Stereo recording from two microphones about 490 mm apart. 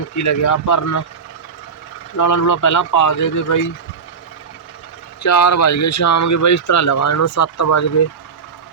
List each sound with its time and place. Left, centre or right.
0.2 s speech: left
2.1 s speech: left
5.2 s speech: left